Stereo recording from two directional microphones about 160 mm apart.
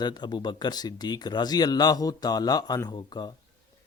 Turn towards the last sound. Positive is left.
turn(degrees=25)  # may be behind; listen again after turning